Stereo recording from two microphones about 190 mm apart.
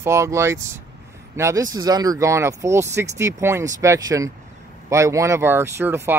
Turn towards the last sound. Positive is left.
turn(degrees=-10)  # may be behind; listen again after turning